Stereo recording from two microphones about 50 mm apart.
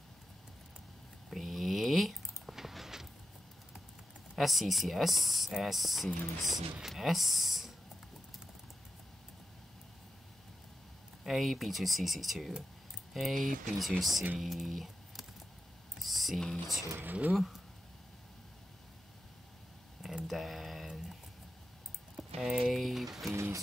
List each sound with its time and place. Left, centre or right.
1.3 s a sound: centre
4.4 s speech: centre
11.2 s speech: centre
14.4 s a sound: centre
17.0 s speech: right
17.3 s speech: centre
20.2 s a sound: centre
22.8 s speech: centre
23.3 s speech: right